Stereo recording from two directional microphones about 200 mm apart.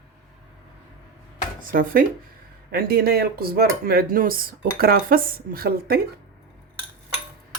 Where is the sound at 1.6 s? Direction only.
45° right (ahead or behind).